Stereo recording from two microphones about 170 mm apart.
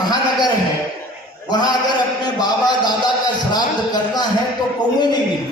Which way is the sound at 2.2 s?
25° left (ahead or behind).